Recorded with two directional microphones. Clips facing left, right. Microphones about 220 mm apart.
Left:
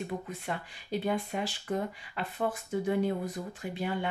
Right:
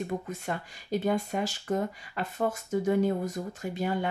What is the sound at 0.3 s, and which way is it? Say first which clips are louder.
Speech: right 3 dB; 45° right (ahead or behind).